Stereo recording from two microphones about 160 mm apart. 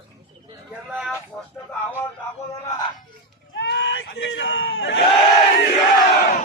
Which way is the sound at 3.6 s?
90° left.